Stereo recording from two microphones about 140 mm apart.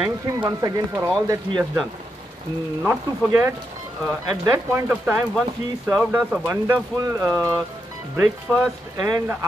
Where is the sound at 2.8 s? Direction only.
10° right (ahead or behind).